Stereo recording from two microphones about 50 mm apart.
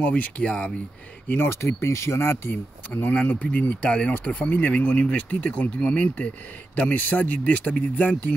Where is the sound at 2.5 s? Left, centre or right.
Left.